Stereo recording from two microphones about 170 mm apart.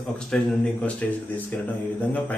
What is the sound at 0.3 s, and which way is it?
Speech, 5° left (ahead or behind).